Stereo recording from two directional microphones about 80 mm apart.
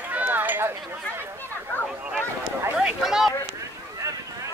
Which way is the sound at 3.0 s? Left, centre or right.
Centre.